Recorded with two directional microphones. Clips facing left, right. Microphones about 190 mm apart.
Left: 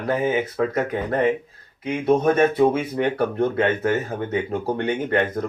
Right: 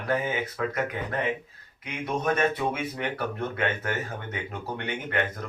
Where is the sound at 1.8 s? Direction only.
30° left (ahead or behind).